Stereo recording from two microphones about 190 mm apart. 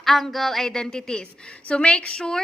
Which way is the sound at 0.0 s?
Centre (ahead or behind).